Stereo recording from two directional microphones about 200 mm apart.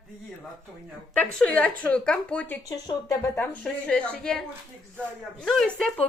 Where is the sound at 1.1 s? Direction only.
5° left (ahead or behind).